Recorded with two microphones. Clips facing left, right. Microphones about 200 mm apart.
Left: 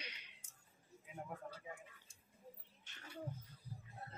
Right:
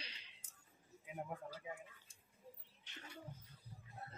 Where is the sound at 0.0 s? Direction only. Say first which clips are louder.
Left 3 dB; 30° right (ahead or behind).